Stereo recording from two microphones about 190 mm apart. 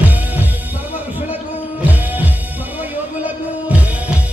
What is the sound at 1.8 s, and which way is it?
Music, 10° right (ahead or behind).